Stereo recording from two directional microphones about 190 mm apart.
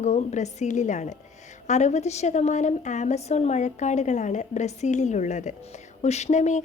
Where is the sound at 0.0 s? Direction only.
35° left (ahead or behind).